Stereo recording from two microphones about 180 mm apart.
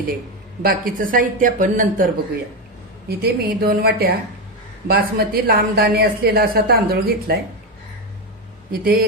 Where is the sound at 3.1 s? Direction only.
60° right (ahead or behind).